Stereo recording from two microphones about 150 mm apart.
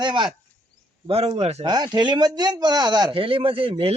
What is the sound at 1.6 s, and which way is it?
Speech, 30° right (ahead or behind).